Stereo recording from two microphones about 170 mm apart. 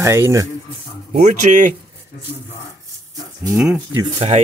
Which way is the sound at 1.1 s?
45° right (ahead or behind).